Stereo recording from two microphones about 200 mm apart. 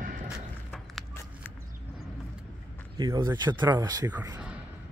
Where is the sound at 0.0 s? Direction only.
40° right (ahead or behind).